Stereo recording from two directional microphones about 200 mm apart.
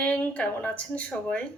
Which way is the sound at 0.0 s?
5° left (ahead or behind).